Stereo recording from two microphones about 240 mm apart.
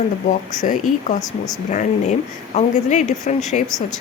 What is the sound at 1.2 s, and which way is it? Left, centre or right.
Speech, centre.